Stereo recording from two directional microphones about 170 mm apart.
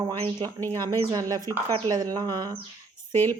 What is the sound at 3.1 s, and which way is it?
Speech, 10° left (ahead or behind).